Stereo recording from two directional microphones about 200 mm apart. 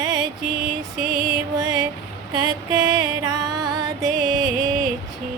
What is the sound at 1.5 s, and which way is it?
Music, 20° right (ahead or behind).